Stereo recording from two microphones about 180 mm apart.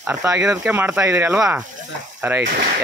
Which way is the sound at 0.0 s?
10° right (ahead or behind).